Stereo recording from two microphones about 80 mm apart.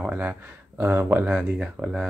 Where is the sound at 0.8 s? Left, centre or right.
Right; by 2.1 s centre.